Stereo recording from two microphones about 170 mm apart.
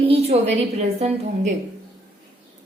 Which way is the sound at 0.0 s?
35° right (ahead or behind).